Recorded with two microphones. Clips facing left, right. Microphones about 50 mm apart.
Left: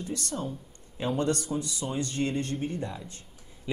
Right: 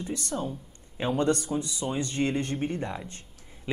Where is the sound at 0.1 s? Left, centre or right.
Right.